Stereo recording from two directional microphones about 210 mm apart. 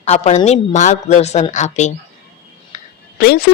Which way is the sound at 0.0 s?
30° left (ahead or behind).